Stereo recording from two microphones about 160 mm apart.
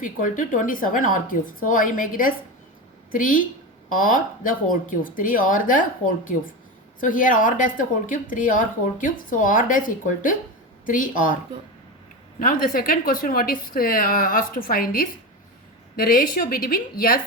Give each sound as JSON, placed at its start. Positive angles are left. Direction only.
{"t": 0.0, "sound": "a woman's voice", "side_deg": 55}
{"t": 7.0, "sound": "a woman's voice", "side_deg": 55}
{"t": 12.4, "sound": "a woman's voice", "side_deg": 60}